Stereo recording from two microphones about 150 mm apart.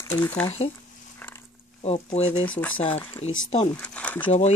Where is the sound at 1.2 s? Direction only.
10° left (ahead or behind).